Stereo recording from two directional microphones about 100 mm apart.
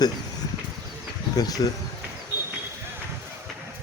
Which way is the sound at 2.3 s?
20° right (ahead or behind).